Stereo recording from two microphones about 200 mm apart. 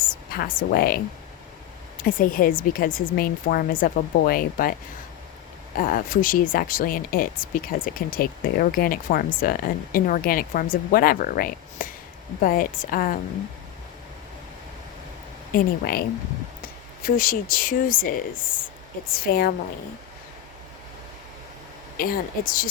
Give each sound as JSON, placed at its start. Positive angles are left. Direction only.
{"t": 0.0, "sound": "a woman's voice", "side_deg": 45}
{"t": 15.5, "sound": "speech", "side_deg": 50}
{"t": 21.9, "sound": "speech", "side_deg": 45}